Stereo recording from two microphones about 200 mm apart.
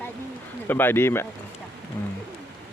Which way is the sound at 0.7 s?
10° left (ahead or behind).